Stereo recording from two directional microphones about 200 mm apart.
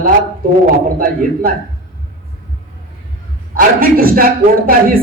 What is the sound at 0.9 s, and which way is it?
Speech, 45° right (ahead or behind).